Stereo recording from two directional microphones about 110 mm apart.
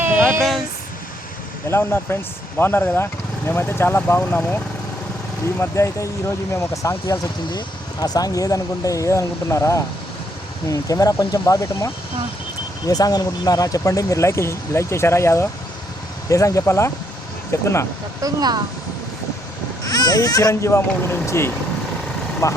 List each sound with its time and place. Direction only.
0.2 s a sound: centre (ahead or behind)
1.6 s speech: 20° left (ahead or behind)
5.5 s speech: 25° left (ahead or behind)
12.9 s speech: 35° left (ahead or behind)
18.2 s speech: 35° right (ahead or behind)
19.8 s speech: 35° left (ahead or behind)